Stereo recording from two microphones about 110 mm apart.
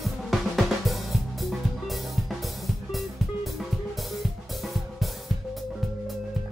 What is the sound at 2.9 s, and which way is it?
Music, centre (ahead or behind).